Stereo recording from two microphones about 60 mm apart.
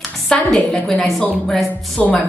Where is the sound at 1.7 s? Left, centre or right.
Left.